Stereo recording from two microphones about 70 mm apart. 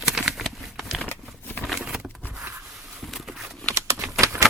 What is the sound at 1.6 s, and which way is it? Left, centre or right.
Patter, centre.